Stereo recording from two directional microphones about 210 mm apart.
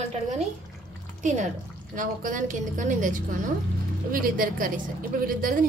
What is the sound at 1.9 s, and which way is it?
A woman's voice, 40° right (ahead or behind).